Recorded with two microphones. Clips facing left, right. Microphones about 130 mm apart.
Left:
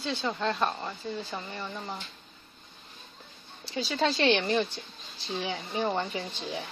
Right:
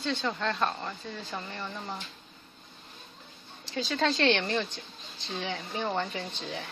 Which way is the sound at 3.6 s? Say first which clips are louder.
Even; 5° left (ahead or behind).